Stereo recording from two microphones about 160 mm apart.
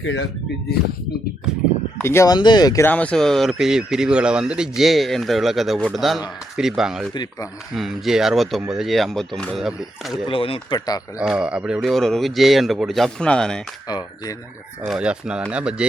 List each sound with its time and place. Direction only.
2.0 s speech: 15° left (ahead or behind)
2.8 s speech: 10° left (ahead or behind)
10.2 s speech: 35° left (ahead or behind)
10.8 s speech: 25° left (ahead or behind)
11.2 s speech: 5° right (ahead or behind)
13.8 s speech: 25° left (ahead or behind)
14.8 s speech: 5° right (ahead or behind)